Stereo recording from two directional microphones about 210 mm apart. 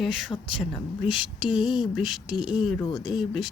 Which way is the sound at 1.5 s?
20° left (ahead or behind).